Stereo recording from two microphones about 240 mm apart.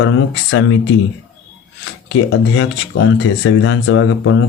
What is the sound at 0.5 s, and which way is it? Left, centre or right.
Speech, left.